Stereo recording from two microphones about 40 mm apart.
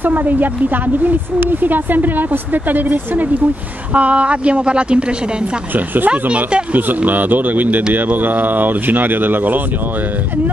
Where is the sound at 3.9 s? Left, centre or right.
Right.